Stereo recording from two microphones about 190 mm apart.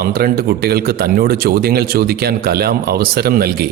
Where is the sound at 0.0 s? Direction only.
55° right (ahead or behind).